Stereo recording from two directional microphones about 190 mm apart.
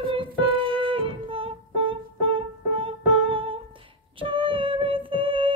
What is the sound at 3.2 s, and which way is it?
Music, 25° right (ahead or behind).